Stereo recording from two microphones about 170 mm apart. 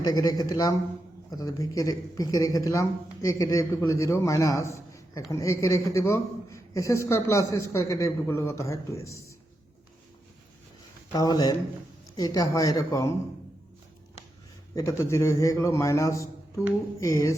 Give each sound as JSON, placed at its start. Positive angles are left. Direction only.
{"t": 0.0, "sound": "a man's voice", "side_deg": 20}
{"t": 11.1, "sound": "speech", "side_deg": 25}
{"t": 14.8, "sound": "a man's voice", "side_deg": 15}